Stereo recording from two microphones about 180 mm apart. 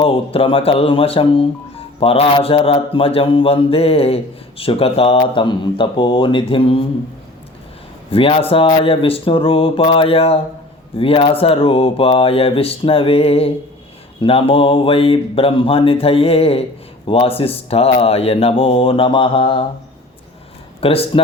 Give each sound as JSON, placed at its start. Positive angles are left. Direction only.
{"t": 0.0, "sound": "speech", "side_deg": 30}
{"t": 8.1, "sound": "speech", "side_deg": 30}
{"t": 20.8, "sound": "speech", "side_deg": 30}